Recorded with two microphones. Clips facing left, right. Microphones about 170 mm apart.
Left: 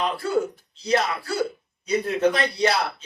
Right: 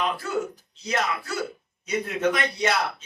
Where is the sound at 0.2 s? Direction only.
30° left (ahead or behind).